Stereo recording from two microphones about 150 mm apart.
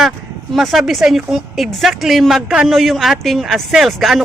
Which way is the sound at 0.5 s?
Centre (ahead or behind).